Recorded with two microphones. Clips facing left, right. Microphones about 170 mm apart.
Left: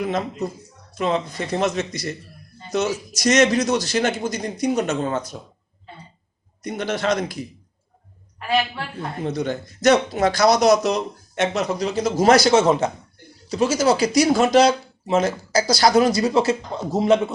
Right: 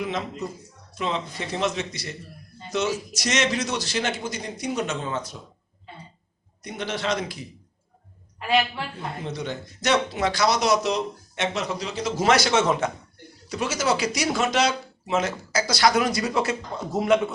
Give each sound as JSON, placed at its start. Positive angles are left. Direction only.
{"t": 0.0, "sound": "speech", "side_deg": 45}
{"t": 6.6, "sound": "speech", "side_deg": 45}
{"t": 9.2, "sound": "speech", "side_deg": 45}